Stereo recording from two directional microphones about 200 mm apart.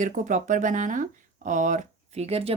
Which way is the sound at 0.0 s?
40° right (ahead or behind).